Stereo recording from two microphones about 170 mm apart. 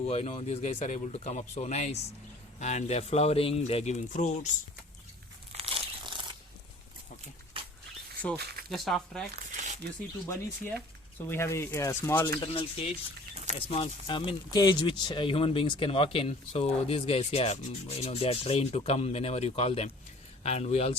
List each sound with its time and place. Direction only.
0.0 s speech: 40° left (ahead or behind)
5.5 s crumpling: 35° right (ahead or behind)
7.6 s a sound: 35° right (ahead or behind)
8.7 s speech: centre (ahead or behind)
9.3 s crumpling: 45° right (ahead or behind)
11.3 s speech: 15° left (ahead or behind)
12.4 s speech: 30° left (ahead or behind)
13.3 s a sound: 45° right (ahead or behind)
13.6 s speech: 35° left (ahead or behind)